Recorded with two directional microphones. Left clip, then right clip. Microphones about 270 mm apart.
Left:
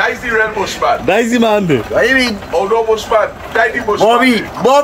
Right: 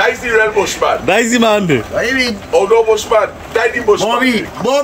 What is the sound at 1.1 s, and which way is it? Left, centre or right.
Speech, centre.